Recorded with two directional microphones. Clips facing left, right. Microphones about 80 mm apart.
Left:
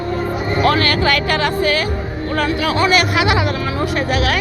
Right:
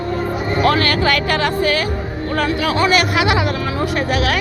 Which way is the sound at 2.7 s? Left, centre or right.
Centre.